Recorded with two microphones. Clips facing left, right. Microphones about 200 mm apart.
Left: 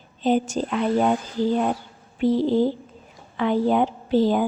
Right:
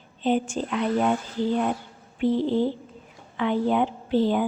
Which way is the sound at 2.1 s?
40° left (ahead or behind).